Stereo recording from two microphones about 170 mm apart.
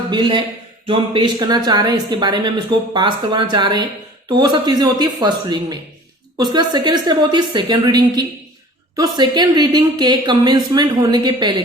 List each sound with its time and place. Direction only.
0.1 s speech: 25° right (ahead or behind)